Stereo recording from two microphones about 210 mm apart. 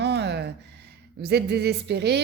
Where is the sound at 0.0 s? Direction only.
55° right (ahead or behind).